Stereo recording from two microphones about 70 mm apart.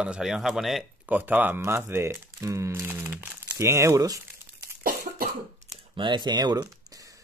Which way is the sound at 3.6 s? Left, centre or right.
Right.